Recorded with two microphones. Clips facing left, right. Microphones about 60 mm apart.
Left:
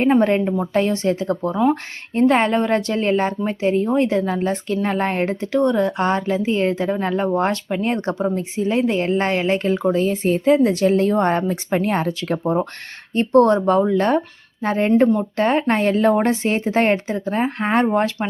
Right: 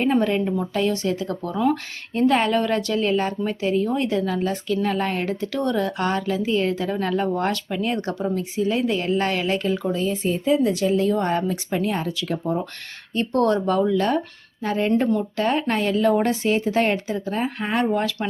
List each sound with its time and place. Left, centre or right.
0.0 s a woman's voice: left
5.5 s a woman's voice: left